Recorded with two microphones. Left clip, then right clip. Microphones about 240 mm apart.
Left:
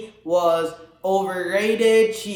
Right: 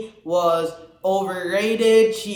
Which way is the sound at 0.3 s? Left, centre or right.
Left.